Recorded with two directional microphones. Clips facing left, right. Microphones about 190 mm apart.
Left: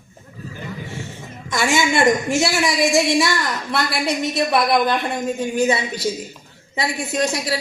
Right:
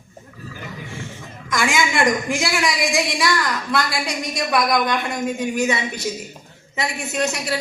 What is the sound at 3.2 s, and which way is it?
A woman's voice, 25° left (ahead or behind).